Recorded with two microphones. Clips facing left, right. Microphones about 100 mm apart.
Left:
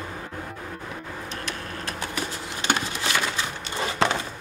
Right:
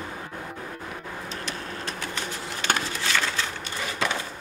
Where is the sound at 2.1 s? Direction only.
20° left (ahead or behind).